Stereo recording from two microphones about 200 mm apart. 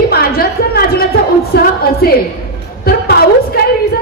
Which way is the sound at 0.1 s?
50° left (ahead or behind).